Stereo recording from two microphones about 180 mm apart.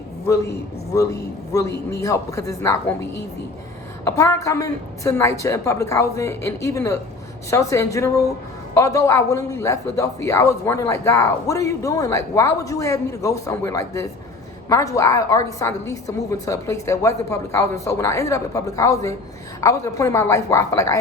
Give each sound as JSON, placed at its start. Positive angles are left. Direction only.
{"t": 0.9, "sound": "a man's voice", "side_deg": 20}
{"t": 4.0, "sound": "a man's voice", "side_deg": 15}